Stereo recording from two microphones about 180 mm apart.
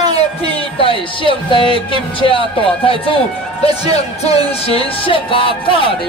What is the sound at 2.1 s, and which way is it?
Speech, 30° left (ahead or behind).